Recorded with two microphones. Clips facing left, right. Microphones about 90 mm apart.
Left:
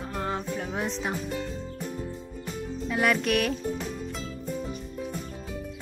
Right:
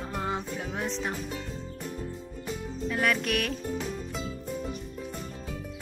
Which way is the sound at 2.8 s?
5° left (ahead or behind).